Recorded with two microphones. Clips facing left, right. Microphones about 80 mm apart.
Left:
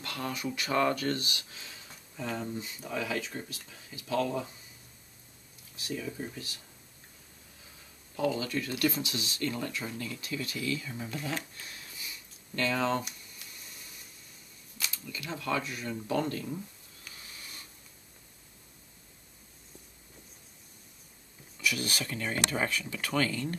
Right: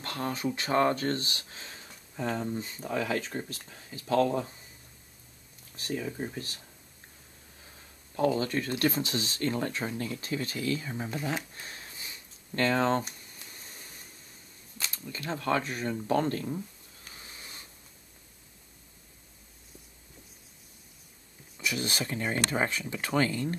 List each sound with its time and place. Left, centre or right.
0.0 s speech: right
5.8 s speech: right
8.2 s speech: right
11.6 s a sound: right
14.8 s speech: right
17.0 s wheeze: right
21.5 s speech: right